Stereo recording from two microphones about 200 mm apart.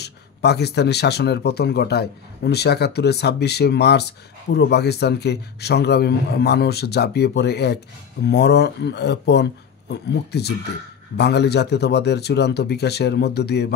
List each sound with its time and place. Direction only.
0.0 s speech: 55° left (ahead or behind)